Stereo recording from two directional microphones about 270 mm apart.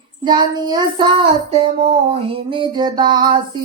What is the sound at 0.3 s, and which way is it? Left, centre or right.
Music, centre.